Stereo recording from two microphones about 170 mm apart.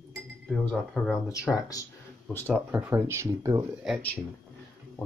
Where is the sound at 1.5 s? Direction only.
15° left (ahead or behind).